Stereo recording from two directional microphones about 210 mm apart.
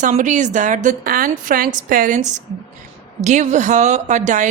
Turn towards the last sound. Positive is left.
turn(degrees=-35)  # may be behind; listen again after turning